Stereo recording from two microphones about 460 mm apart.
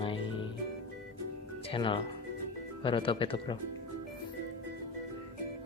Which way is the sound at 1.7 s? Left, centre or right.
Centre.